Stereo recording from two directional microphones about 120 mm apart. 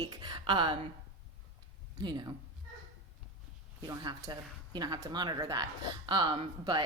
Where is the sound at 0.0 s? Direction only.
35° right (ahead or behind).